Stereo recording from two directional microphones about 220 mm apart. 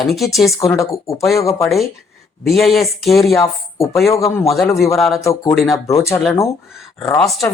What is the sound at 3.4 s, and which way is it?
Speech, 15° left (ahead or behind).